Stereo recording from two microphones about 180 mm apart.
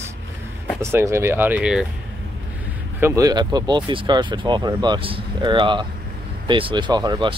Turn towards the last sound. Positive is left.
turn(degrees=-25)  # may be behind; listen again after turning